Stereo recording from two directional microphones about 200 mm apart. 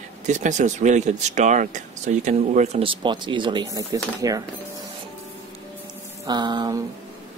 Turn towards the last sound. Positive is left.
turn(degrees=-20)  # may be behind; listen again after turning